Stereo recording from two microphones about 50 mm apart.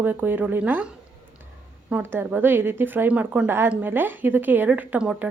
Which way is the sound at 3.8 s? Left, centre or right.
Right.